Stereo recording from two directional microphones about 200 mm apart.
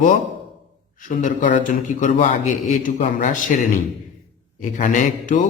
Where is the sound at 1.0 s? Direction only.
40° left (ahead or behind).